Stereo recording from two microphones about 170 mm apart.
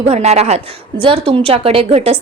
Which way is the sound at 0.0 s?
40° right (ahead or behind).